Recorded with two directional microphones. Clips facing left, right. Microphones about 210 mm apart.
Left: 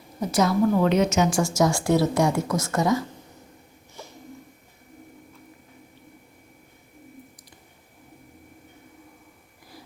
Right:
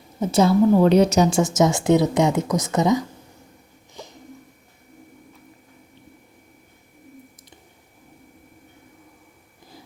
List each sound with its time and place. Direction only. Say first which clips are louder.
0.2 s a woman's voice: right 4 dB; 25° right (ahead or behind)
1.4 s a woman's voice: right 3 dB; 20° right (ahead or behind)
4.0 s a sound: right 3 dB; 15° right (ahead or behind)